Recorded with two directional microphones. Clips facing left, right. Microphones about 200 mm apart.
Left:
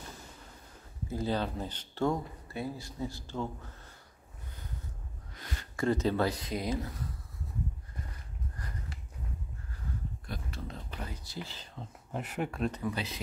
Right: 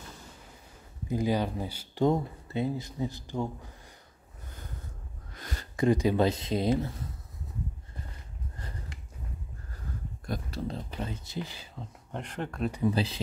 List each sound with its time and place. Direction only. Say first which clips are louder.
1.0 s speech: right 4 dB; 15° right (ahead or behind)
2.0 s speech: right 5 dB; 20° right (ahead or behind)
5.3 s a sound: right 3 dB; 45° right (ahead or behind)
5.8 s speech: right 4 dB; 15° right (ahead or behind)
10.2 s speech: right 12 dB; 40° right (ahead or behind); by 12.7 s 5° left (ahead or behind)
12.8 s speech: right 7 dB; 30° right (ahead or behind)